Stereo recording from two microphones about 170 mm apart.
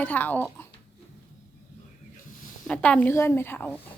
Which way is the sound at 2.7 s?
5° left (ahead or behind).